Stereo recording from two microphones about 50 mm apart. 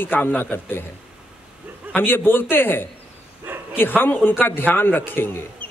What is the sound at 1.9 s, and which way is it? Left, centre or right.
Speech, left.